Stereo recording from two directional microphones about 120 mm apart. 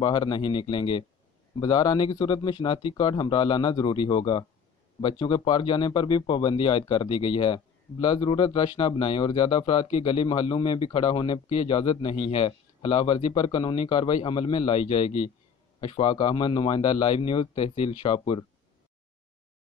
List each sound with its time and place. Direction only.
0.0 s speech: 35° left (ahead or behind)